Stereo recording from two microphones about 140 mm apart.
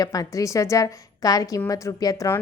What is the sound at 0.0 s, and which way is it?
A woman's voice, 25° left (ahead or behind).